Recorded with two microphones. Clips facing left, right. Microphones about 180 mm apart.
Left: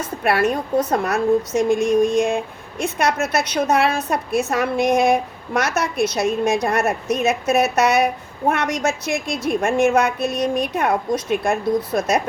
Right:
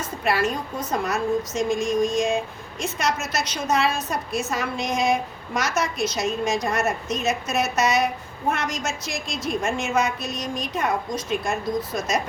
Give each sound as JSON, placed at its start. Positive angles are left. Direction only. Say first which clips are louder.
{"t": 0.2, "sound": "speech", "louder": "left 5 dB", "side_deg": 55}